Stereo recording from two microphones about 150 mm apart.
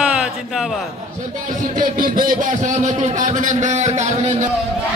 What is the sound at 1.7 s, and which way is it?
Speech, 70° right (ahead or behind).